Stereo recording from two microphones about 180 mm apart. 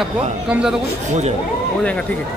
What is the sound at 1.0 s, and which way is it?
Speech, 40° right (ahead or behind).